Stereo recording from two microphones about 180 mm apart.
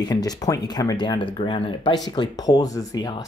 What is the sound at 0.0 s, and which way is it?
Speech, 20° left (ahead or behind).